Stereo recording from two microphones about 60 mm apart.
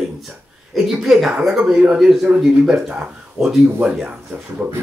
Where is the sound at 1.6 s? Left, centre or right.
Centre.